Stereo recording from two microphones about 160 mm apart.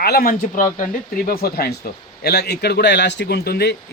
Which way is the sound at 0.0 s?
70° left (ahead or behind).